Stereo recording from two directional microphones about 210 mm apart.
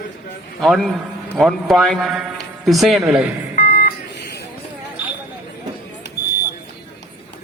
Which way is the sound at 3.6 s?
45° left (ahead or behind).